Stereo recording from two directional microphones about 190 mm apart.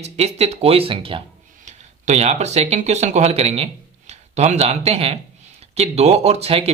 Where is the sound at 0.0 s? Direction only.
35° right (ahead or behind).